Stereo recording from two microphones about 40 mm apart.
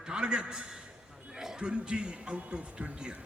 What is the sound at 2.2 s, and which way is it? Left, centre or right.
A man's voice, right.